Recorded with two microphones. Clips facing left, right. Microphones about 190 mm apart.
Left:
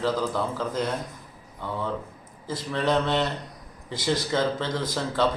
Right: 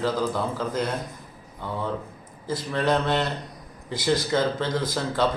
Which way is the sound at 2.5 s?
5° right (ahead or behind).